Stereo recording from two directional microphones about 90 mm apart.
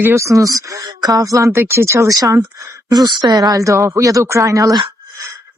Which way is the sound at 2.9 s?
50° right (ahead or behind).